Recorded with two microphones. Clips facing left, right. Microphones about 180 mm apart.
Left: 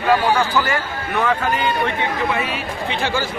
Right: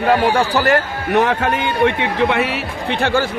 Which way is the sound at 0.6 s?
70° right (ahead or behind).